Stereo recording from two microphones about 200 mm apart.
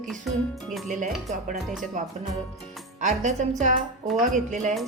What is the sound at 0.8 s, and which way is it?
Speech, 40° right (ahead or behind).